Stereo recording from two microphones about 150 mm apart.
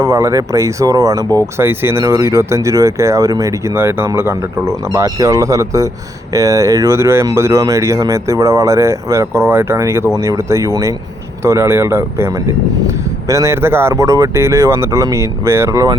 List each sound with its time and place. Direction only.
0.0 s speech: 20° right (ahead or behind)